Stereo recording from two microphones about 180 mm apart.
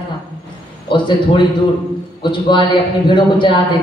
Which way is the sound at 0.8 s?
25° left (ahead or behind).